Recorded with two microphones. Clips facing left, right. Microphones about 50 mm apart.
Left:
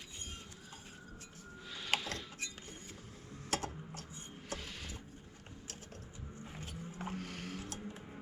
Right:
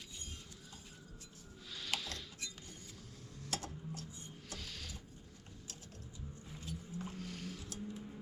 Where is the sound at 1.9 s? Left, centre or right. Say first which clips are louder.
Left 6 dB; left.